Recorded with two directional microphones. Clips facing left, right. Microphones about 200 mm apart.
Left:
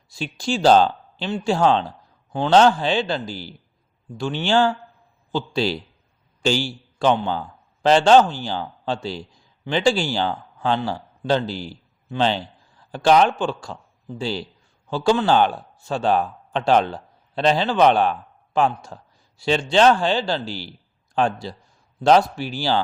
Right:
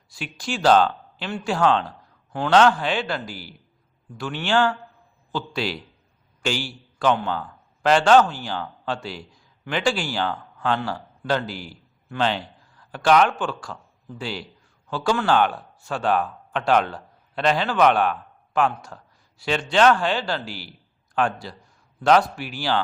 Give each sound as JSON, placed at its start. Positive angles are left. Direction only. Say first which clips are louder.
{"t": 0.1, "sound": "a man's voice", "louder": "left 5 dB", "side_deg": 25}